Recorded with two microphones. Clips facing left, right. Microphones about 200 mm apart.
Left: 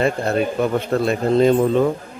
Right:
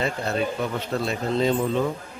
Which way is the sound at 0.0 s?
55° left (ahead or behind).